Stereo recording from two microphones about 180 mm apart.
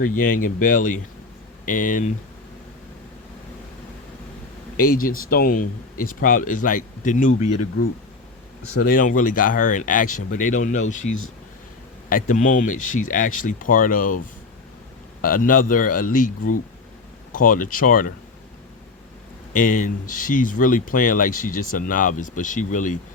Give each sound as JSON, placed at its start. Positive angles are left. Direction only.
{"t": 0.0, "sound": "speech", "side_deg": 50}
{"t": 4.8, "sound": "speech", "side_deg": 50}
{"t": 8.8, "sound": "speech", "side_deg": 50}
{"t": 15.2, "sound": "speech", "side_deg": 50}
{"t": 17.3, "sound": "speech", "side_deg": 50}
{"t": 19.5, "sound": "speech", "side_deg": 45}